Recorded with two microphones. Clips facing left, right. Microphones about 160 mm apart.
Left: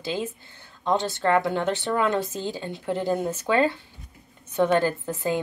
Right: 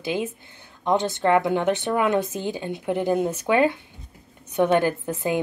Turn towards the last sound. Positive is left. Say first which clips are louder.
# right 2 dB
turn(degrees=-15)  # may be behind; listen again after turning